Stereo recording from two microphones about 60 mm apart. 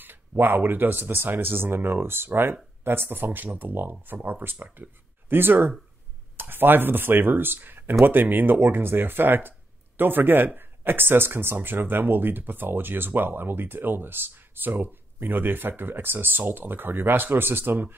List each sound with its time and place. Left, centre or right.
0.0 s speech: right